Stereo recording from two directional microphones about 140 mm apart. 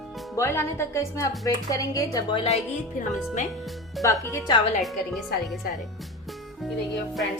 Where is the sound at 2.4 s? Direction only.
50° left (ahead or behind).